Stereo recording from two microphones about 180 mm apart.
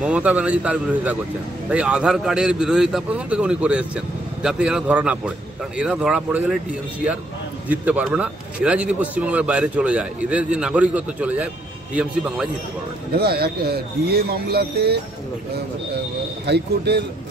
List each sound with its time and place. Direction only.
0.0 s a man's voice: 5° right (ahead or behind)
7.6 s a man's voice: 10° right (ahead or behind)
13.2 s speech: 60° right (ahead or behind)
16.4 s speech: 65° right (ahead or behind)